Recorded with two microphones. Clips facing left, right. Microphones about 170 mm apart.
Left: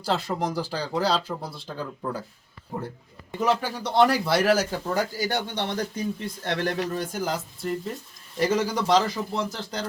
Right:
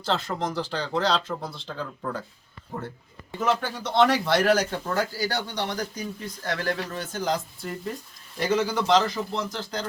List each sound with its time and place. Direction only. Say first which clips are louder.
0.0 s speech: left 1 dB; 10° left (ahead or behind)